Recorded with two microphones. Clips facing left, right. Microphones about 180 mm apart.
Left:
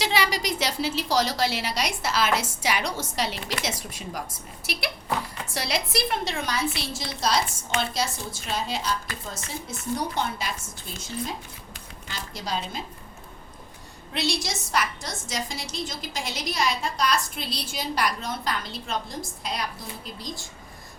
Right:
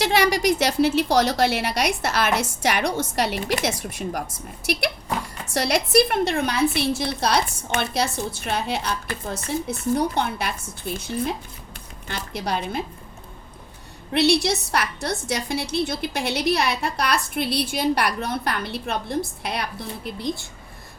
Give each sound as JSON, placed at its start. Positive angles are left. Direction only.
{"t": 0.0, "sound": "a woman's voice", "side_deg": -55}
{"t": 4.6, "sound": "a woman's voice", "side_deg": -50}
{"t": 14.1, "sound": "a woman's voice", "side_deg": -65}